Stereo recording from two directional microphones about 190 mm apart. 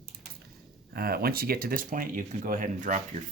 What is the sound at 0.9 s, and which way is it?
Speech, 55° right (ahead or behind).